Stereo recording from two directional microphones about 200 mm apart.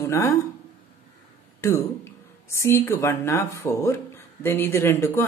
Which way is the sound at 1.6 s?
15° left (ahead or behind).